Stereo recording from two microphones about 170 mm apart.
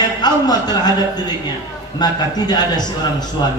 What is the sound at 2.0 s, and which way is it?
A man's voice, 25° left (ahead or behind).